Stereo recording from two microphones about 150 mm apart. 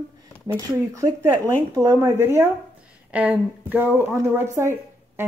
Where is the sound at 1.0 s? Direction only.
20° right (ahead or behind).